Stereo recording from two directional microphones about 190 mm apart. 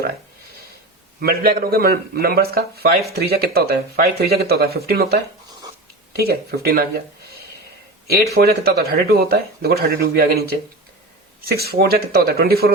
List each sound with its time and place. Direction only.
1.2 s a man's voice: 50° right (ahead or behind)
6.1 s speech: 55° right (ahead or behind)
8.1 s speech: 55° right (ahead or behind)